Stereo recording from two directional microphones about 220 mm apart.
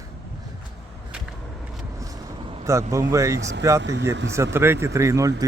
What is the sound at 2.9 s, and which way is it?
Speech, 15° right (ahead or behind).